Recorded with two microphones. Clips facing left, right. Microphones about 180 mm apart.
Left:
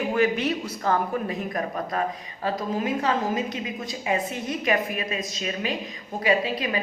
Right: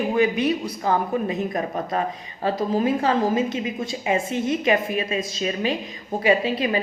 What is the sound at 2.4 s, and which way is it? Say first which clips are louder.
A woman's voice: right 5 dB; 30° right (ahead or behind).